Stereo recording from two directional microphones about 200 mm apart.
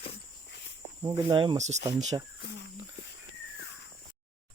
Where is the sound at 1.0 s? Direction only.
20° right (ahead or behind).